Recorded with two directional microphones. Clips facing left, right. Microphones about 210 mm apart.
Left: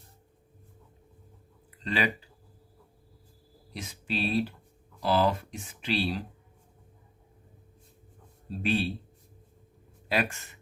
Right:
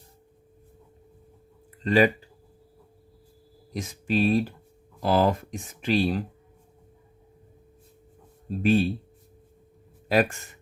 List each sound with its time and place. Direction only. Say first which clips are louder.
1.8 s speech: right 10 dB; 45° right (ahead or behind)
3.7 s speech: right 7 dB; 45° right (ahead or behind)
8.4 s speech: right 7 dB; 45° right (ahead or behind)